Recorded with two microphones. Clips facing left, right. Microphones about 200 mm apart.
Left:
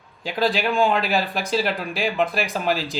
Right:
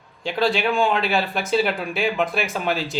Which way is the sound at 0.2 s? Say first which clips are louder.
Right 1 dB; centre (ahead or behind).